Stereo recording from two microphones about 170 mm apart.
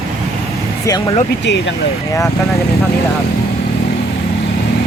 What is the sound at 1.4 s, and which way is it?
Speech, 90° left.